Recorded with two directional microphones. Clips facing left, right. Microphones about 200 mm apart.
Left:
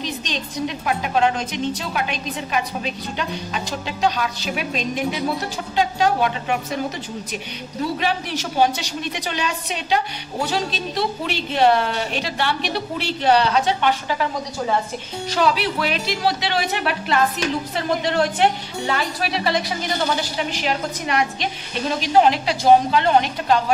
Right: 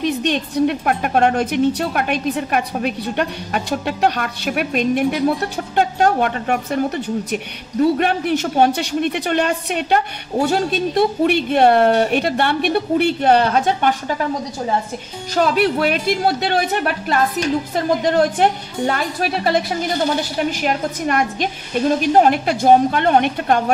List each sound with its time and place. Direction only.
0.0 s a woman's voice: 60° right (ahead or behind)
8.0 s speech: 55° right (ahead or behind)
15.3 s a woman's voice: 50° right (ahead or behind)